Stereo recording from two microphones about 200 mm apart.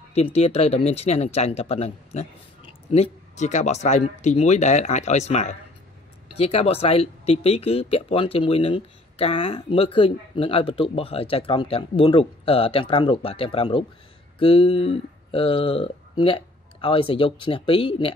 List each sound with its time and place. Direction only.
0.1 s speech: 30° left (ahead or behind)